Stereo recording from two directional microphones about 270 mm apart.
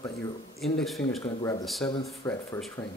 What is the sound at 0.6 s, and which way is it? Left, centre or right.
Speech, centre.